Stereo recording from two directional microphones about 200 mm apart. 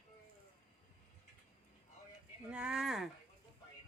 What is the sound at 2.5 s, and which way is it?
Speech, 5° right (ahead or behind).